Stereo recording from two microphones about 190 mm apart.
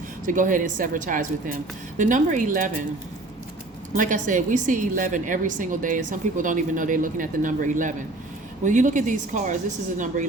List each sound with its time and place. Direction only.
0.3 s a woman's voice: 45° right (ahead or behind)
3.9 s a woman's voice: 45° right (ahead or behind)